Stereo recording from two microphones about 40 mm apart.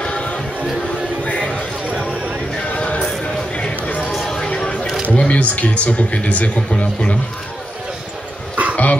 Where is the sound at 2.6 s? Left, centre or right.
Left.